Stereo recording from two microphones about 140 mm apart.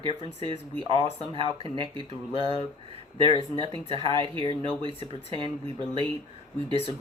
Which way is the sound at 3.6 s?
40° right (ahead or behind).